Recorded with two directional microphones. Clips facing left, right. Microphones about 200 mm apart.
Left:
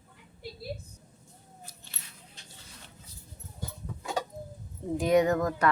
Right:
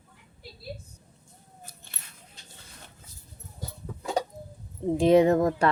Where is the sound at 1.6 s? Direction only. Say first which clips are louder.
Right 2 dB; 55° right (ahead or behind).